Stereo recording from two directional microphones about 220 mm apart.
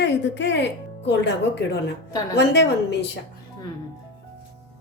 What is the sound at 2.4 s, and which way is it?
Speech, 50° left (ahead or behind).